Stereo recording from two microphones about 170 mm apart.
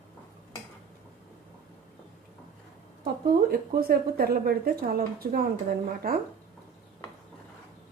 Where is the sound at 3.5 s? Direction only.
60° right (ahead or behind).